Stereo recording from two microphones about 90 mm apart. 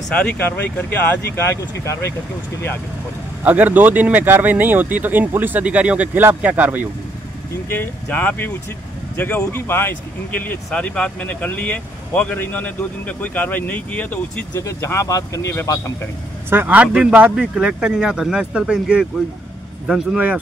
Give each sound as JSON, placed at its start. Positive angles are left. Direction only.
{"t": 0.1, "sound": "speech", "side_deg": 15}
{"t": 3.4, "sound": "speech", "side_deg": -20}
{"t": 7.7, "sound": "speech", "side_deg": 20}
{"t": 14.6, "sound": "speech", "side_deg": 30}
{"t": 16.4, "sound": "a man's voice", "side_deg": -20}